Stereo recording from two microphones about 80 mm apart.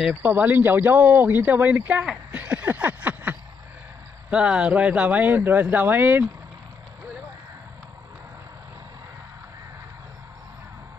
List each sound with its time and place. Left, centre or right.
0.1 s speech: right
2.3 s a sound: centre
4.3 s speech: centre